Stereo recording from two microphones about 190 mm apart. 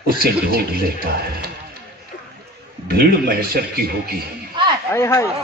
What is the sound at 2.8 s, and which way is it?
Speech, 55° right (ahead or behind).